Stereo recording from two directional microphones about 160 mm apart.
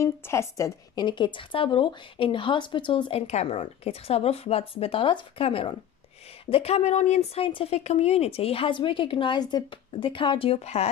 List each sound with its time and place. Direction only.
0.0 s speech: 15° left (ahead or behind); by 10.9 s 40° left (ahead or behind)